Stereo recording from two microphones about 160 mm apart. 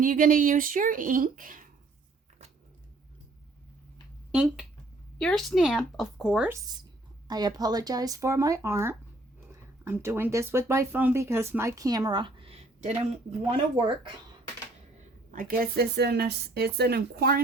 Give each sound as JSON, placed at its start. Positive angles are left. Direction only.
{"t": 0.0, "sound": "speech", "side_deg": -60}
{"t": 4.3, "sound": "speech", "side_deg": -5}
{"t": 7.3, "sound": "speech", "side_deg": -25}
{"t": 15.3, "sound": "a woman's voice", "side_deg": -60}